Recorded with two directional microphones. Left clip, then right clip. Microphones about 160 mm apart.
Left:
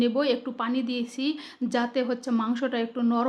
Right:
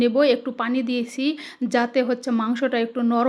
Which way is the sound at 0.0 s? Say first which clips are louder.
Right 6 dB; 25° right (ahead or behind).